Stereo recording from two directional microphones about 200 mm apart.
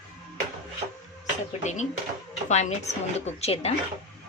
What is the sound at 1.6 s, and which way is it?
Speech, 35° left (ahead or behind).